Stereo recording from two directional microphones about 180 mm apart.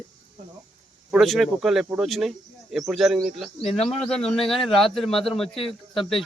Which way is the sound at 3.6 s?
35° left (ahead or behind).